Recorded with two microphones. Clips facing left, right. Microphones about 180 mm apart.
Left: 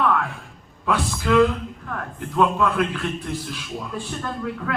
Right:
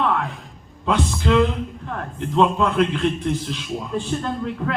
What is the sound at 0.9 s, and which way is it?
Speech, 20° right (ahead or behind).